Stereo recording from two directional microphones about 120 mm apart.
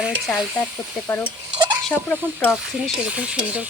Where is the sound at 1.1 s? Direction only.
15° left (ahead or behind).